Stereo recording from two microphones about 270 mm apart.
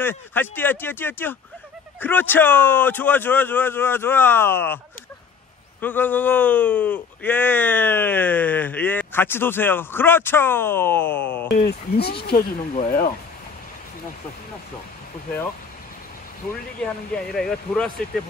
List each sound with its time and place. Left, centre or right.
0.0 s speech: centre
5.8 s speech: centre
11.5 s speech: left
16.8 s speech: centre